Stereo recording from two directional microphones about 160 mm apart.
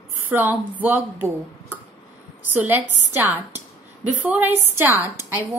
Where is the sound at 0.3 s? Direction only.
10° right (ahead or behind).